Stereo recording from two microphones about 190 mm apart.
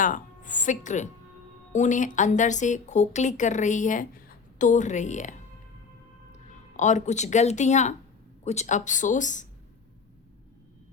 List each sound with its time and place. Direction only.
0.0 s music: 45° left (ahead or behind)
1.7 s speech: 40° left (ahead or behind)
6.7 s speech: 40° left (ahead or behind)